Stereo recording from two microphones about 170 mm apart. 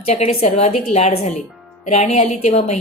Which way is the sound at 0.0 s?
40° left (ahead or behind).